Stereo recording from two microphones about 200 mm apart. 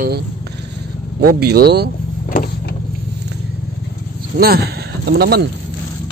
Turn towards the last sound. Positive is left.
turn(degrees=-55)  # may be behind; listen again after turning